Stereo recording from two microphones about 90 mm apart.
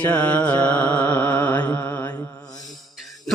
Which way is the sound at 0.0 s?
15° left (ahead or behind).